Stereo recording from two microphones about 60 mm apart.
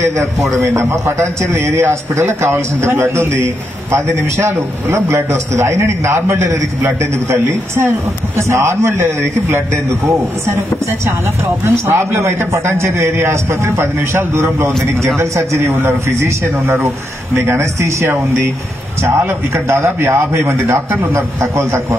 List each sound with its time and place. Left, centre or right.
0.2 s a man's voice: right
19.0 s a man's voice: right